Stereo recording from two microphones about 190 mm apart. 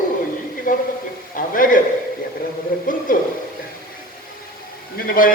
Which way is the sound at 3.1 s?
45° left (ahead or behind).